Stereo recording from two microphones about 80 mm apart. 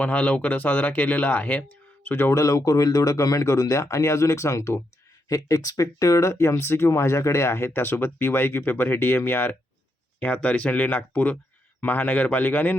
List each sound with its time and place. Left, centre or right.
0.0 s speech: centre